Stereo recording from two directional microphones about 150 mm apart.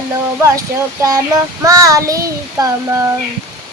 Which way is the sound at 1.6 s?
20° right (ahead or behind).